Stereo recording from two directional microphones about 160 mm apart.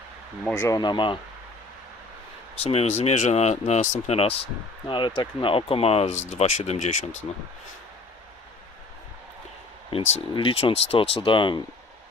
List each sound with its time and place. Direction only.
0.4 s speech: 15° left (ahead or behind)
2.6 s speech: 40° left (ahead or behind)
4.9 s speech: 30° left (ahead or behind); by 7.2 s 45° left (ahead or behind)
9.9 s speech: 35° left (ahead or behind)